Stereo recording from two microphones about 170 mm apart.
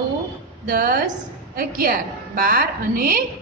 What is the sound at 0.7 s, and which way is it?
A woman's voice, 60° right (ahead or behind).